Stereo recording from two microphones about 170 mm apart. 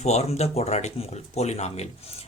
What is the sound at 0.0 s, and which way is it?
Speech, 40° left (ahead or behind).